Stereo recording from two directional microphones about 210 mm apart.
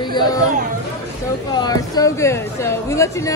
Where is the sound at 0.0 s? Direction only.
20° left (ahead or behind).